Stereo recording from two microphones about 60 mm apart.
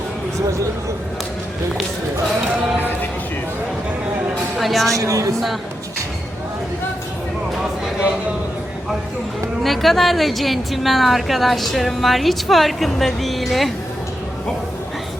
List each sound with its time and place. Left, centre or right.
0.3 s speech: right
4.5 s music: centre
4.9 s speech: right
9.6 s a woman's voice: centre